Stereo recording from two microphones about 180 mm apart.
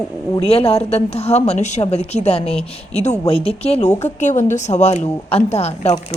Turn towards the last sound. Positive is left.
turn(degrees=35)  # may be behind; listen again after turning